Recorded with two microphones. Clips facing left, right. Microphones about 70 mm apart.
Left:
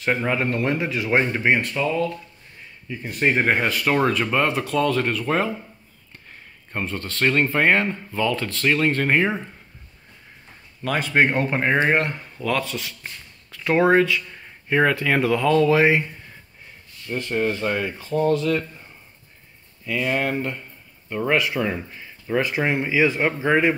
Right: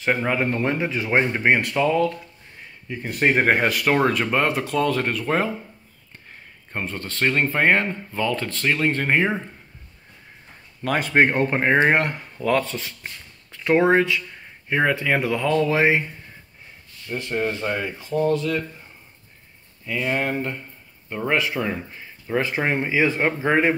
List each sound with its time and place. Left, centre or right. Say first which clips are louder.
0.0 s speech: even; centre
0.7 s speech: even; right
1.6 s speech: right 3 dB; right
3.8 s speech: right 1 dB; right
6.7 s speech: left 1 dB; right
10.8 s speech: right 1 dB; right
11.3 s speech: right 2 dB; right
11.9 s speech: right 1 dB; right
13.5 s speech: even; right
17.3 s speech: left 2 dB; centre
18.1 s speech: left 1 dB; centre
19.9 s speech: left 1 dB; centre